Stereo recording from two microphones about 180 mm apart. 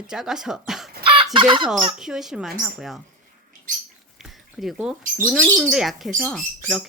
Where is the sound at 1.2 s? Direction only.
25° right (ahead or behind).